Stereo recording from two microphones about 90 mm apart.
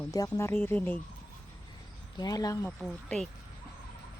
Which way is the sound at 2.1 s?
45° left (ahead or behind).